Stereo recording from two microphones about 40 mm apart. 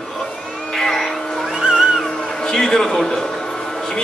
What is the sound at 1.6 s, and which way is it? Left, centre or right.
Music, right.